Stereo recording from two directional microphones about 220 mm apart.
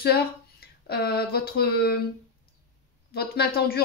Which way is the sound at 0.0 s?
45° left (ahead or behind).